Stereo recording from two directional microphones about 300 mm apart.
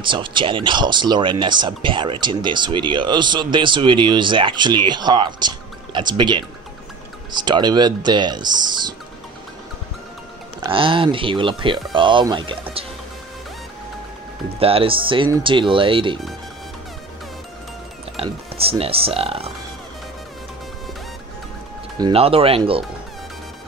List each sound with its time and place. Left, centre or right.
0.0 s speech: centre
10.6 s speech: centre
14.6 s speech: centre
18.1 s speech: centre
21.9 s speech: centre